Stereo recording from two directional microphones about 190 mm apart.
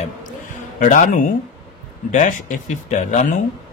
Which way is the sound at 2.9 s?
40° left (ahead or behind).